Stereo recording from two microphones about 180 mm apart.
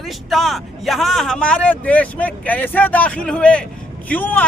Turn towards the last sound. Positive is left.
turn(degrees=10)  # may be behind; listen again after turning